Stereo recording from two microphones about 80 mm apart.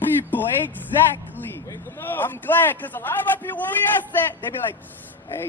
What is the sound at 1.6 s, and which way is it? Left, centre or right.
A man's voice, left.